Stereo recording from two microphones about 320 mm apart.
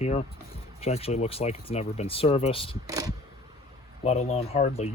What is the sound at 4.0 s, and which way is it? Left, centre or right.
Speech, left.